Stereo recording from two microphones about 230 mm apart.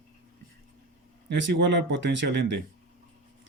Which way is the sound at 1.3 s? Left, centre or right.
Right.